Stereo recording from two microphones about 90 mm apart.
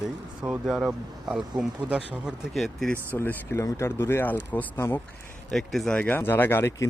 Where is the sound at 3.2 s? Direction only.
30° left (ahead or behind).